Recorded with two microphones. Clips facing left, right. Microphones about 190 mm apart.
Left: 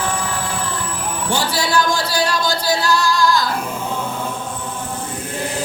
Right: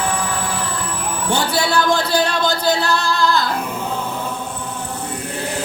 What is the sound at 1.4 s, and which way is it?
Singing, 60° right (ahead or behind).